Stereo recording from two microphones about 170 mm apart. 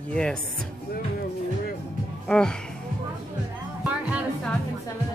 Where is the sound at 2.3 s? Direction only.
5° left (ahead or behind).